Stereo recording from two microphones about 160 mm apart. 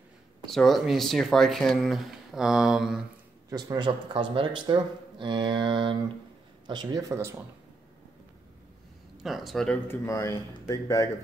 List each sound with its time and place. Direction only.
0.5 s speech: centre (ahead or behind)
3.4 s speech: 25° right (ahead or behind)
9.2 s speech: centre (ahead or behind)
9.8 s speech: 20° left (ahead or behind)